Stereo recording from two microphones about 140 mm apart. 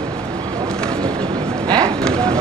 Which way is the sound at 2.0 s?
5° left (ahead or behind).